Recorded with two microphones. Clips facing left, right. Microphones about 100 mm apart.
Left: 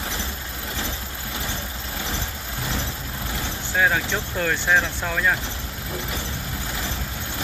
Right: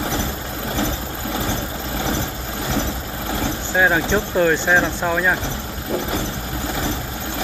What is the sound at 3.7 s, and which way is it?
Speech, 25° right (ahead or behind).